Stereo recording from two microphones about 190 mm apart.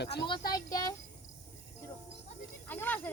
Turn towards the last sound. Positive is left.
turn(degrees=10)  # may be behind; listen again after turning